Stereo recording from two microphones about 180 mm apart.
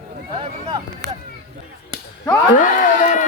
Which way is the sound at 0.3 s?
30° right (ahead or behind).